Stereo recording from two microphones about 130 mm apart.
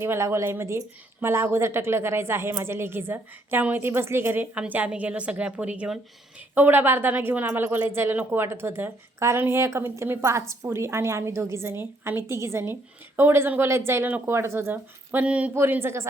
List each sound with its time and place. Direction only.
0.0 s a woman's voice: 20° right (ahead or behind)